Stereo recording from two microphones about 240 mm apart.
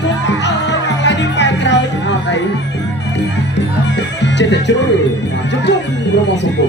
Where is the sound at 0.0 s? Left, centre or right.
Left.